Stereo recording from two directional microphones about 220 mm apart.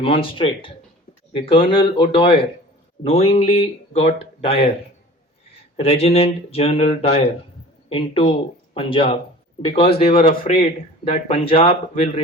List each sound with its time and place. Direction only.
0.0 s speech: 25° left (ahead or behind)
5.7 s speech: 25° left (ahead or behind)